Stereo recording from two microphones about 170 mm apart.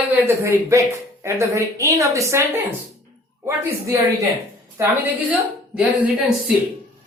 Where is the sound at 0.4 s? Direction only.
15° right (ahead or behind).